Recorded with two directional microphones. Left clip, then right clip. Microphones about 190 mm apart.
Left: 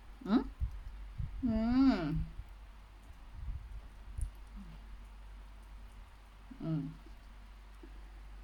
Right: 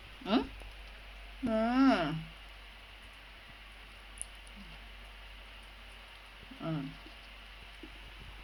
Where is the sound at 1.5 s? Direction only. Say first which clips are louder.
Right 4 dB; 25° left (ahead or behind).